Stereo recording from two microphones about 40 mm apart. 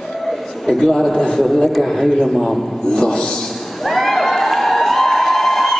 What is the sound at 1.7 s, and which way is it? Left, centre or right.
Speech, centre.